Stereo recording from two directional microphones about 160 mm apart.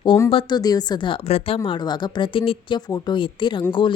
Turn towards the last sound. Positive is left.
turn(degrees=30)  # may be behind; listen again after turning